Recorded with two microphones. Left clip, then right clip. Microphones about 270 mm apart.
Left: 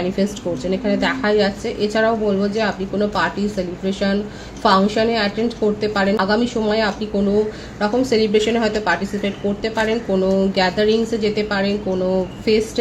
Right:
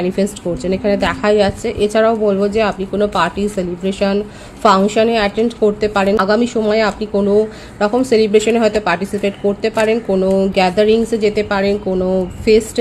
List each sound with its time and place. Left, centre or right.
0.2 s speech: right